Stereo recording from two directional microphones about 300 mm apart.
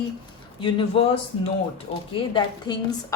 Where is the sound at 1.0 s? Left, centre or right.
Centre.